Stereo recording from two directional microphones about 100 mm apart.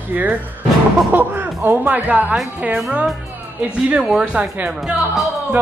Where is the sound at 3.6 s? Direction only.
10° right (ahead or behind).